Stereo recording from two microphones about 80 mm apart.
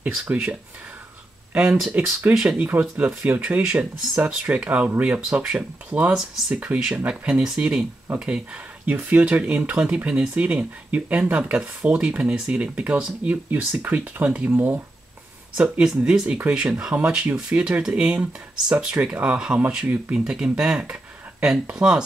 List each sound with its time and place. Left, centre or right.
0.2 s speech: centre